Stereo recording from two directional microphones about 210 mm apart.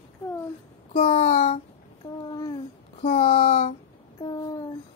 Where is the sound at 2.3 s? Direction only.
20° left (ahead or behind).